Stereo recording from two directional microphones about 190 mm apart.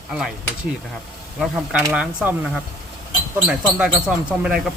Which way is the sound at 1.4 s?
5° right (ahead or behind).